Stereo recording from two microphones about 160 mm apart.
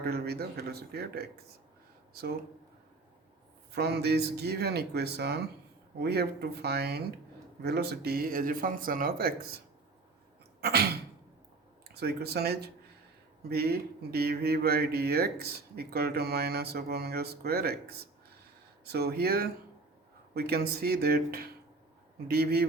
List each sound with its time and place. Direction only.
0.0 s speech: 75° right (ahead or behind)
3.7 s speech: 90° right; by 9.5 s 70° right (ahead or behind)
10.6 s sneeze: 80° right
11.9 s speech: 80° right